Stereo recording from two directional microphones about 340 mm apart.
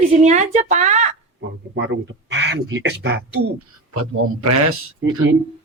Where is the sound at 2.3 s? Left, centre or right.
Right.